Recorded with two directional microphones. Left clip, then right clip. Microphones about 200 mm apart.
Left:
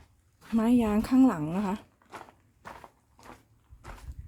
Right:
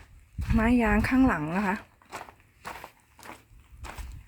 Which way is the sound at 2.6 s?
55° right (ahead or behind).